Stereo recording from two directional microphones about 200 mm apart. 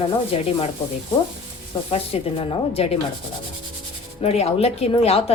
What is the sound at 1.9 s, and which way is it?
Speech, 30° left (ahead or behind).